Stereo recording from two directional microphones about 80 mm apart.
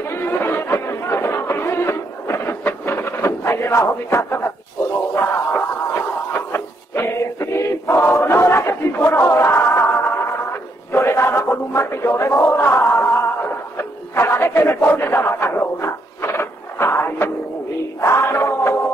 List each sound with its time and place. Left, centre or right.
0.1 s chatter: left
5.1 s a sound: left
18.0 s music: left